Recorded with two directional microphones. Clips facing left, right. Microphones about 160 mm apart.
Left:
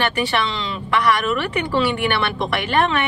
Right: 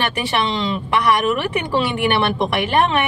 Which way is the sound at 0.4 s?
20° right (ahead or behind).